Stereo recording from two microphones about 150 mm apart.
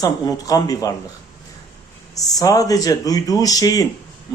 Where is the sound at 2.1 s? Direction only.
25° left (ahead or behind).